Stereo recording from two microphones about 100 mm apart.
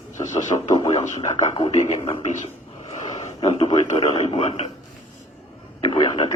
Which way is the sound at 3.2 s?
80° left.